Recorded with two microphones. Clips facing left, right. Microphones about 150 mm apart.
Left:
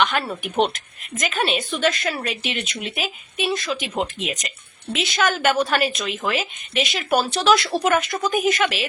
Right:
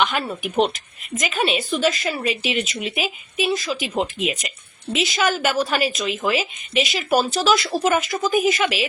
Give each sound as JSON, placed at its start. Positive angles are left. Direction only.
{"t": 0.0, "sound": "a woman's voice", "side_deg": -5}